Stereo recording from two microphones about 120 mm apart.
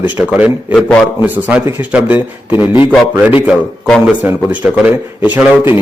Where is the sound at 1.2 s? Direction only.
15° right (ahead or behind).